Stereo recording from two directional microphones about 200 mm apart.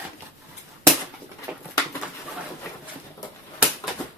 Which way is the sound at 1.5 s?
10° right (ahead or behind).